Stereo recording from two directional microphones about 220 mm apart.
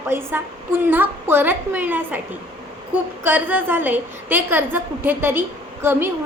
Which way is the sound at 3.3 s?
10° right (ahead or behind).